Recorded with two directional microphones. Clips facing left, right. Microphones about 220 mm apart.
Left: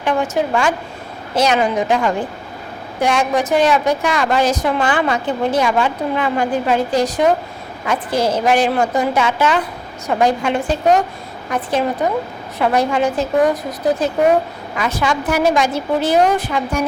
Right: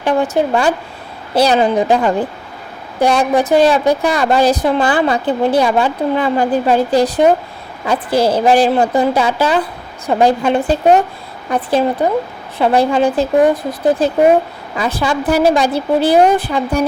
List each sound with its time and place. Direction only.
0.0 s a woman's voice: 35° right (ahead or behind)